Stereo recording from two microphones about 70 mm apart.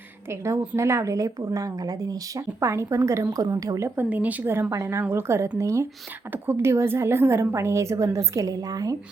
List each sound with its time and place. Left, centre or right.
0.3 s a woman's voice: right
2.6 s a woman's voice: right
3.9 s speech: right
4.7 s a woman's voice: right